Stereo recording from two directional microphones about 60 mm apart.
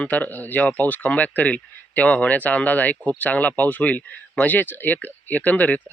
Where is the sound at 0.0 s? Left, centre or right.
Left.